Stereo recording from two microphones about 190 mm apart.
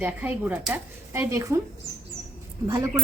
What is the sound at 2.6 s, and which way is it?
Speech, 20° right (ahead or behind).